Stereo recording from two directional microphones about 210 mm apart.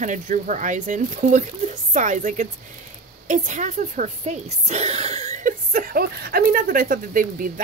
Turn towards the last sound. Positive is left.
turn(degrees=-40)  # may be behind; listen again after turning